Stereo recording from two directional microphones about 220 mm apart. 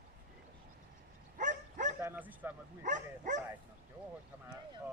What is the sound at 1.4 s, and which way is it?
Bow-wow, 35° right (ahead or behind).